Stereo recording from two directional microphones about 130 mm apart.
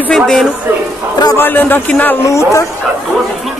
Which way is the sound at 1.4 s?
15° left (ahead or behind).